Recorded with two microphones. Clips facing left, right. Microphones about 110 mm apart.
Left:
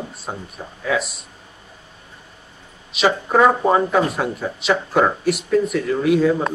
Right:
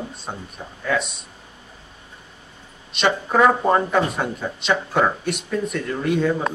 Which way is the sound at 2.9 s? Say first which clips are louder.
Left 2 dB; 5° left (ahead or behind).